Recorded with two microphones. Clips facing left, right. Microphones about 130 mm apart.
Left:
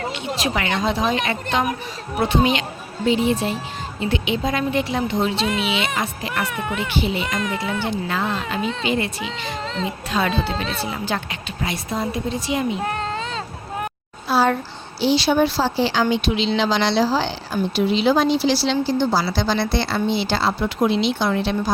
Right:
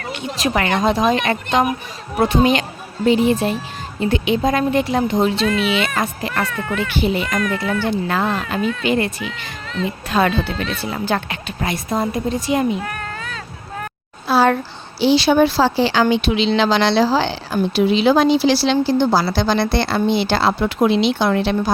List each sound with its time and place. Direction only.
0.1 s a woman's voice: 45° right (ahead or behind)
5.5 s speech: 20° left (ahead or behind)
6.0 s a woman's voice: 50° right (ahead or behind)
6.4 s speech: 15° left (ahead or behind)
7.0 s a woman's voice: 50° right (ahead or behind)
7.3 s speech: 20° left (ahead or behind)
7.9 s a woman's voice: 50° right (ahead or behind)
9.5 s speech: 30° left (ahead or behind)
10.1 s a woman's voice: 55° right (ahead or behind)
10.4 s speech: 35° left (ahead or behind)
10.8 s a woman's voice: 50° right (ahead or behind)
12.8 s child singing: 25° left (ahead or behind)
14.3 s a sound: 70° right (ahead or behind)
15.0 s speech: 70° right (ahead or behind)